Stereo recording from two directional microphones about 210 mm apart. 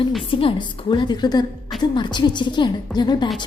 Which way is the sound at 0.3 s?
25° left (ahead or behind).